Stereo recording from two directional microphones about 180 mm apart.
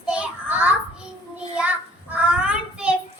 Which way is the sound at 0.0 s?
5° right (ahead or behind).